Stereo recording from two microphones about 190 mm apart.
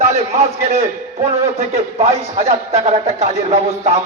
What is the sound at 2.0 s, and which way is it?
A man's voice, 35° right (ahead or behind).